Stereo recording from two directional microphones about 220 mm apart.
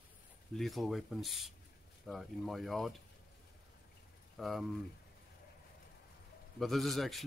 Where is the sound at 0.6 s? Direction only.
Centre (ahead or behind).